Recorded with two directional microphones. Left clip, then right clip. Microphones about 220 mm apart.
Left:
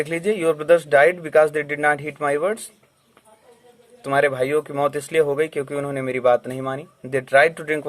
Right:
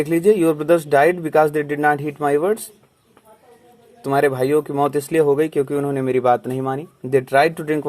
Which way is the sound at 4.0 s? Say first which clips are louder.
Right 1 dB; 20° right (ahead or behind).